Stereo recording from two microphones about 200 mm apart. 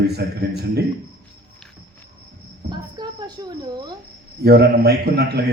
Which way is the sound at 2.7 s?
20° right (ahead or behind).